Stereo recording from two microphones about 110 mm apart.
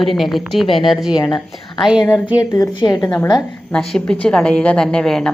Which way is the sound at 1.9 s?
5° right (ahead or behind).